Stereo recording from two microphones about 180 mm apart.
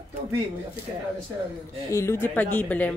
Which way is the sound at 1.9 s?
15° left (ahead or behind).